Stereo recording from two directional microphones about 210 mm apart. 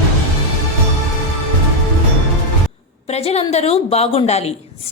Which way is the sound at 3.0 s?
30° left (ahead or behind).